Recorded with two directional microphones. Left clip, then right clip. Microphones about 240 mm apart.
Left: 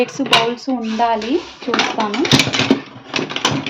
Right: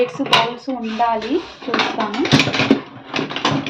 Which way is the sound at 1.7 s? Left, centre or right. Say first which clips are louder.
Left 2 dB; left.